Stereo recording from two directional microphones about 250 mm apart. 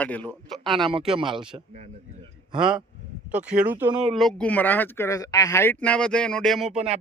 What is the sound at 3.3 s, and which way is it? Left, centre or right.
Speech, centre.